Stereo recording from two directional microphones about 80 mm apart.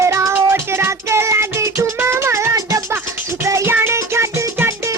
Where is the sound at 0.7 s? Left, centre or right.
Right.